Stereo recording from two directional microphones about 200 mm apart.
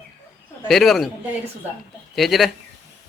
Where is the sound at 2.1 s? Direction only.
Centre (ahead or behind).